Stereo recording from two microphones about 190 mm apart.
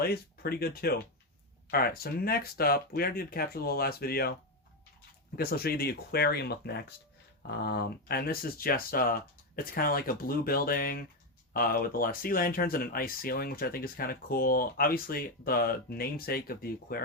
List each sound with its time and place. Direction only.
0.0 s speech: 55° left (ahead or behind)
5.4 s speech: 55° left (ahead or behind)